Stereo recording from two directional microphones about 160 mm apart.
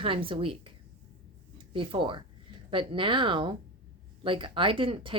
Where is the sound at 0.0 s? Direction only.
35° right (ahead or behind).